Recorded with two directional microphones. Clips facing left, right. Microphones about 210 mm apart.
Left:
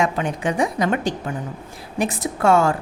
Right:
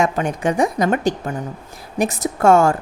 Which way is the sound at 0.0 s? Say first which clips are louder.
Right 3 dB; 45° right (ahead or behind).